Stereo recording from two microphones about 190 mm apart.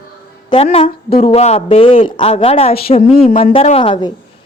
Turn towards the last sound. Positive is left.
turn(degrees=25)  # may be behind; listen again after turning